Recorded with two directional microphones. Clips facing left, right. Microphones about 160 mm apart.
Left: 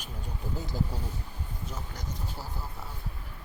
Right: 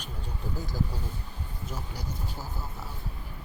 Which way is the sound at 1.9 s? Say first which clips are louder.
Right 1 dB; 10° right (ahead or behind).